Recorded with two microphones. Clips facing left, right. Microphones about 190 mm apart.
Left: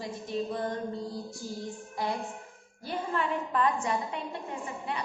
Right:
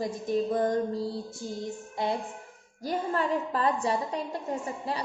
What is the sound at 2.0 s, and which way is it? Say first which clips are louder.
Speech: right 3 dB; 25° right (ahead or behind).